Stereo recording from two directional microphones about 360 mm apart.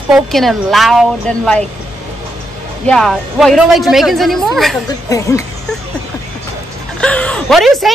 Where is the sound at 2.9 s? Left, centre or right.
Centre.